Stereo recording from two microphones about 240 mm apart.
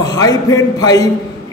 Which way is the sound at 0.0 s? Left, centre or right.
Centre.